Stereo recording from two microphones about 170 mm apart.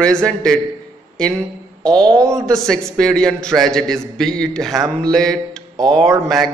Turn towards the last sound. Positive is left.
turn(degrees=0)  # may be behind; listen again after turning